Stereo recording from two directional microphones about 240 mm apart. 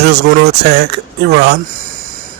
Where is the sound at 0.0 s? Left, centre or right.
Right.